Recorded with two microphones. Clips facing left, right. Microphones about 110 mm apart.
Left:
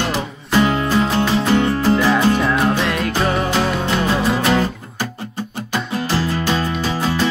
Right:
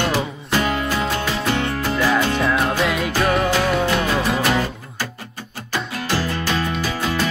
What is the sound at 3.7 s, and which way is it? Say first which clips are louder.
Music: even; centre (ahead or behind).